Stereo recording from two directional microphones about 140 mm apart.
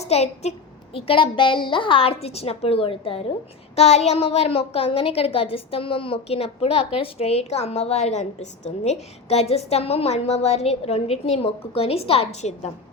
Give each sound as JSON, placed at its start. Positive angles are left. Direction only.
{"t": 0.0, "sound": "a child's voice", "side_deg": 50}
{"t": 0.9, "sound": "a woman's voice", "side_deg": 40}